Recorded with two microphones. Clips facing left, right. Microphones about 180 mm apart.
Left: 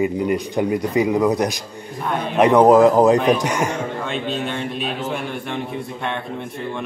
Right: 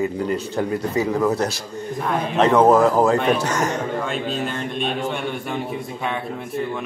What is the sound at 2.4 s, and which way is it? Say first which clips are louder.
Speech: left 3 dB; 15° left (ahead or behind).